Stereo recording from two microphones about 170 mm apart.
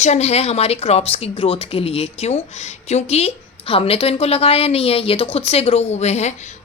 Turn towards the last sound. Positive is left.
turn(degrees=40)  # may be behind; listen again after turning